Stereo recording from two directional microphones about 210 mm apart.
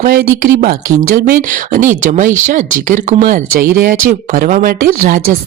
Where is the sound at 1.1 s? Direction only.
40° right (ahead or behind).